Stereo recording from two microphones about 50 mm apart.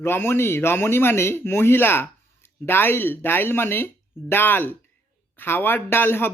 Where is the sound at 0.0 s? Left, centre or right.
Left.